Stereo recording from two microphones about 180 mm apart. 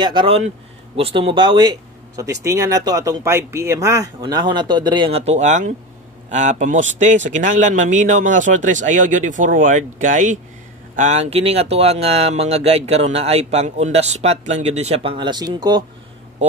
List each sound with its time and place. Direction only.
0.0 s speech: 25° right (ahead or behind)